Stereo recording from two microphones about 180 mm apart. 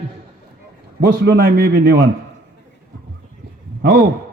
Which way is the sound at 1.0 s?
65° right (ahead or behind).